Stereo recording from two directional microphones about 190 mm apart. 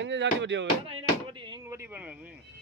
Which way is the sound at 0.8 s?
25° right (ahead or behind).